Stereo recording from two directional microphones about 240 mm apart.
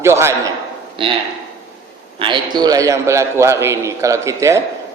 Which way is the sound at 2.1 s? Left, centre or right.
Centre.